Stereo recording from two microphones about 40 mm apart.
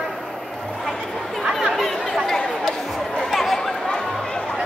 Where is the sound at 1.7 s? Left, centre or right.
Centre.